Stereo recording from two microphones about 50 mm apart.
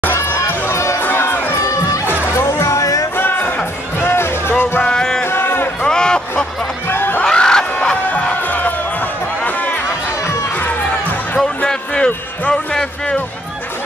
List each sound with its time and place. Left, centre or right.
0.0 s crowd: left
0.5 s music: left
1.0 s music: left
1.7 s music: left
2.3 s music: left
3.2 s music: left
4.8 s music: centre
5.2 s a sound: left
5.8 s a sound: centre
6.9 s a sound: left
7.2 s a sound: centre
8.1 s crowd: left
11.3 s music: centre